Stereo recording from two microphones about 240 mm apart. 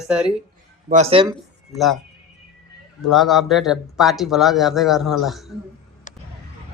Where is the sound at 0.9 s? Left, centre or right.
Right.